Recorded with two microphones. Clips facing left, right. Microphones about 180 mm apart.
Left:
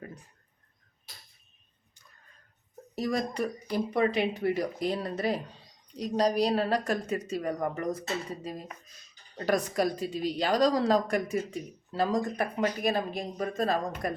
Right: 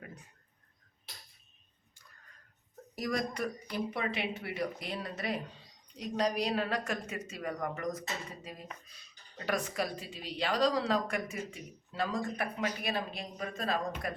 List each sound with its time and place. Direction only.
2.9 s speech: 25° left (ahead or behind)
8.9 s speech: 45° left (ahead or behind)